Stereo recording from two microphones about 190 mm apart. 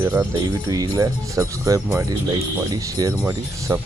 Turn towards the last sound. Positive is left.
turn(degrees=-10)  # may be behind; listen again after turning